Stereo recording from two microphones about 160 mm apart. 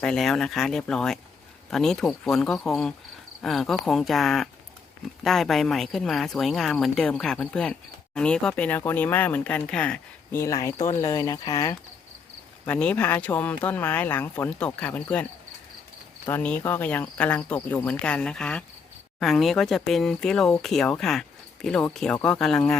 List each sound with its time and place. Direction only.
0.0 s speech: 5° left (ahead or behind)
16.3 s speech: 10° left (ahead or behind)